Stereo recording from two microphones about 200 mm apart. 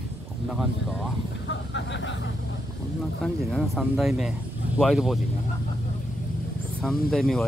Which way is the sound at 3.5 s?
Centre (ahead or behind).